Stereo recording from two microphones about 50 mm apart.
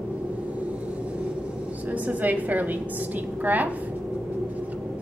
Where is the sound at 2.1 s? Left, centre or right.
Right.